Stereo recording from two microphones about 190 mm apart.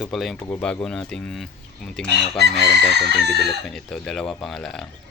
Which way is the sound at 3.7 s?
Centre (ahead or behind).